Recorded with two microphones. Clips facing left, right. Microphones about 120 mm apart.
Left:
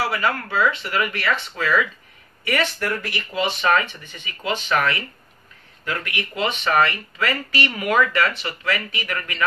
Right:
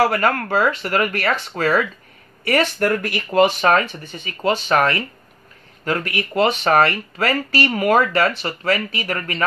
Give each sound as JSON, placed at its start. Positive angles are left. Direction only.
{"t": 0.0, "sound": "speech", "side_deg": -45}